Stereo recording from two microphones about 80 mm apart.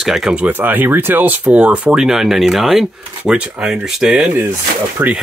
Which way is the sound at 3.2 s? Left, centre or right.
Centre.